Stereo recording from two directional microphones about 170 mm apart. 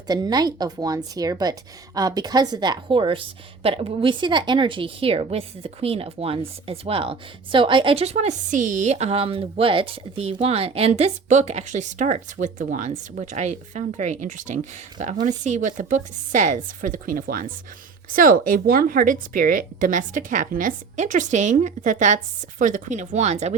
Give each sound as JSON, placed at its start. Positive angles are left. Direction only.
{"t": 0.1, "sound": "a woman's voice", "side_deg": -25}